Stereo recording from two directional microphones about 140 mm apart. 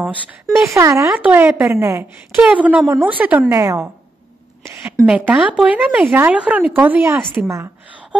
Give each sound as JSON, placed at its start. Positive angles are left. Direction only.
{"t": 0.7, "sound": "a woman's voice", "side_deg": -20}
{"t": 4.6, "sound": "a sound", "side_deg": -20}
{"t": 5.0, "sound": "a woman's voice", "side_deg": -5}